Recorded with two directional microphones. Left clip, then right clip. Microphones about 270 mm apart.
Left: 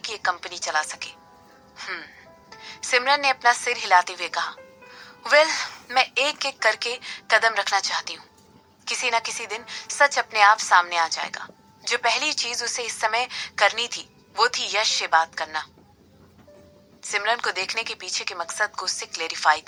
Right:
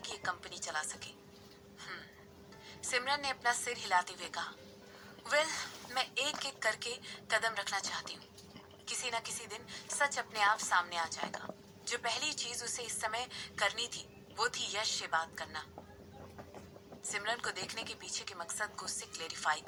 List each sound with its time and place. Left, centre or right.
0.0 s a woman's voice: left
17.1 s a woman's voice: left